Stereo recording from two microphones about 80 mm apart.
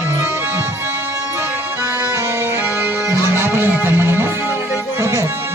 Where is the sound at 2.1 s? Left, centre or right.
Right.